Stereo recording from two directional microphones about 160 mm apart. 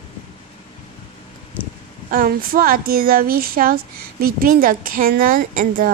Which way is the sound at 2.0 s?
60° right (ahead or behind).